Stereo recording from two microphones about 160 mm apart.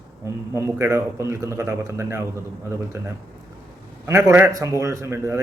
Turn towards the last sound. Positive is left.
turn(degrees=-15)  # may be behind; listen again after turning